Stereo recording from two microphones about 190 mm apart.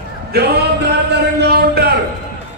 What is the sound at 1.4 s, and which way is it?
Speech, 55° right (ahead or behind).